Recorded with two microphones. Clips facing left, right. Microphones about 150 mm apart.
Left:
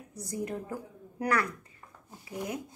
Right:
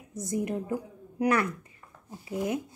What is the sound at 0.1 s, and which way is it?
Speech, 20° right (ahead or behind).